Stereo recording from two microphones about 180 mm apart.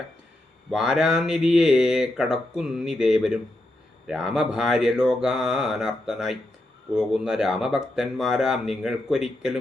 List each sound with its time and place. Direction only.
0.7 s speech: 5° right (ahead or behind)